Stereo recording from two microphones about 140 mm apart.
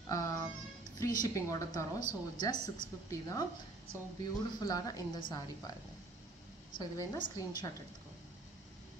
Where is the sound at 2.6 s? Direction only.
25° left (ahead or behind).